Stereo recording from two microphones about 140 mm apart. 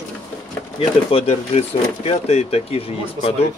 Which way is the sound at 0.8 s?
40° left (ahead or behind).